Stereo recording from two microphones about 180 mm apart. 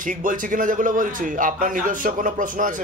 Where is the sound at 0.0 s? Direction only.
50° right (ahead or behind).